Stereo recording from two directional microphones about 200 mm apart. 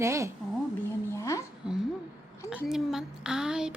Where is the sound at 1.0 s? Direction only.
15° left (ahead or behind).